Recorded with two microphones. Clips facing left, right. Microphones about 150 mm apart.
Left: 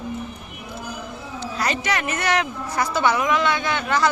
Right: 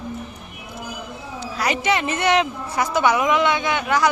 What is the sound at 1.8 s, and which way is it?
A woman's voice, 25° right (ahead or behind).